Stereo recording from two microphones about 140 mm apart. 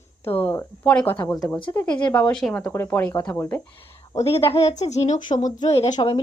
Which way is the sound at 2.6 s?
20° left (ahead or behind).